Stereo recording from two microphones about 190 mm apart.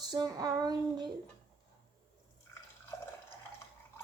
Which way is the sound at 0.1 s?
20° right (ahead or behind).